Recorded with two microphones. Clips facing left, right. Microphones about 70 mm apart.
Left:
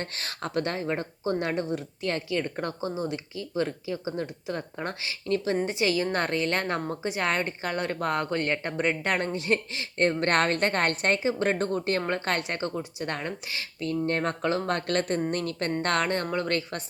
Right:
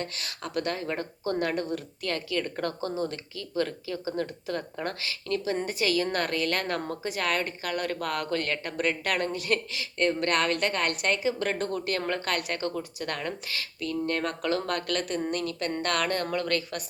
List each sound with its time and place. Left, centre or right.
0.0 s speech: left